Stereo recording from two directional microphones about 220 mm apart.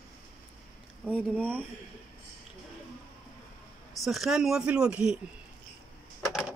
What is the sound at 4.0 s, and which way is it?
Speech, centre (ahead or behind).